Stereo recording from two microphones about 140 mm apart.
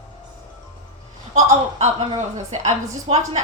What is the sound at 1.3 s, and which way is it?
A woman's voice, 50° right (ahead or behind).